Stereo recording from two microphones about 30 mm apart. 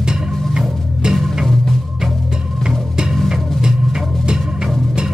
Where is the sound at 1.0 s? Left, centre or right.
Right.